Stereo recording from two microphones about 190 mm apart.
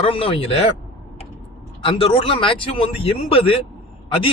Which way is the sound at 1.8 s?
30° left (ahead or behind).